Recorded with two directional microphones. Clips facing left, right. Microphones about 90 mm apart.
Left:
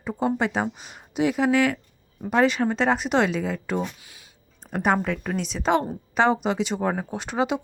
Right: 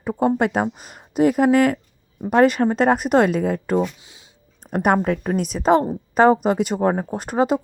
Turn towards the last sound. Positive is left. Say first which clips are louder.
# right 5 dB
turn(degrees=-40)  # may be behind; listen again after turning